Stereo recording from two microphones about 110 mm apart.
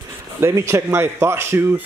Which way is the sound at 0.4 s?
25° right (ahead or behind).